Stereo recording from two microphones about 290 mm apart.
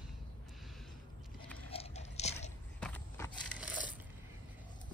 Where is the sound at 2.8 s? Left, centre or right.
Centre.